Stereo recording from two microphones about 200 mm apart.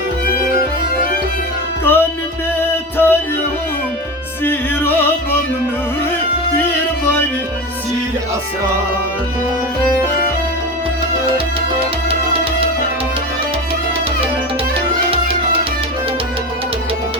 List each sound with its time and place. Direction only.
1.8 s music: 10° left (ahead or behind)
4.4 s music: 10° left (ahead or behind)
12.0 s music: 30° right (ahead or behind)
15.1 s music: 30° right (ahead or behind)